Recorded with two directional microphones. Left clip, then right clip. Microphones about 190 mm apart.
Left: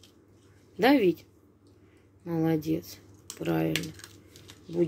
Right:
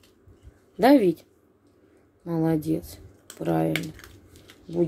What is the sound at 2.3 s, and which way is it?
Speech, 30° right (ahead or behind).